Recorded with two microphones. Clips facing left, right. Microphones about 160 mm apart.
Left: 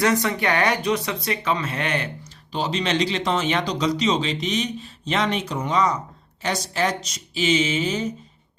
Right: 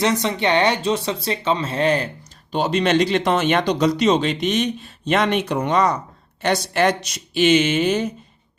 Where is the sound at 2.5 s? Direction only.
55° right (ahead or behind).